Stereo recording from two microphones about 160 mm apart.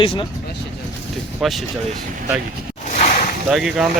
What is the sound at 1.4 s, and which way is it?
Speech, centre (ahead or behind).